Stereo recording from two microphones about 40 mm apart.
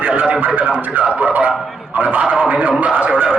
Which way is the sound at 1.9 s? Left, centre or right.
Right.